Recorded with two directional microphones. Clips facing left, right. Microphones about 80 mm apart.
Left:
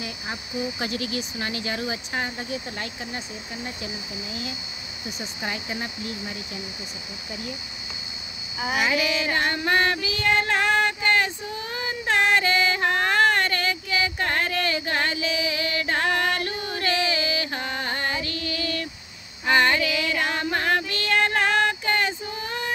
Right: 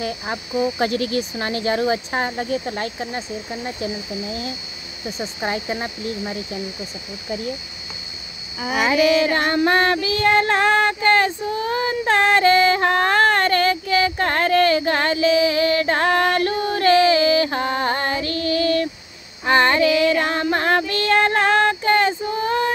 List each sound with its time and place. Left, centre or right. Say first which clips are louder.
0.0 s speech: right 8 dB; right
8.8 s female singing: right 10 dB; right